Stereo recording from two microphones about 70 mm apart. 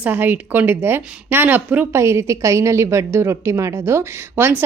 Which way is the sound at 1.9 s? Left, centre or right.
Right.